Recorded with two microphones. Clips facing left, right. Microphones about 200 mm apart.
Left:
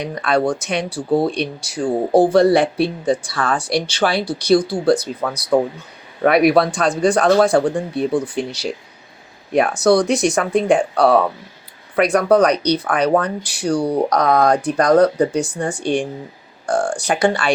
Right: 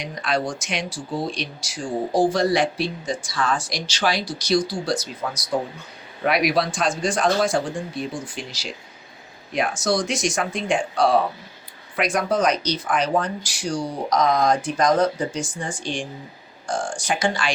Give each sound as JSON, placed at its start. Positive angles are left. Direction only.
{"t": 0.1, "sound": "speech", "side_deg": 60}
{"t": 9.6, "sound": "speech", "side_deg": 60}